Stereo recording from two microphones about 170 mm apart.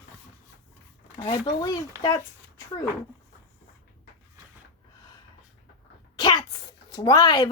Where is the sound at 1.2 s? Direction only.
25° left (ahead or behind).